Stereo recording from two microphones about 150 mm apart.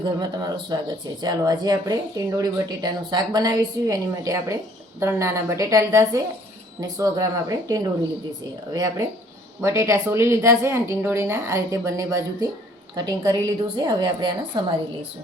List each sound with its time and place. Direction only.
0.0 s speech: 30° right (ahead or behind)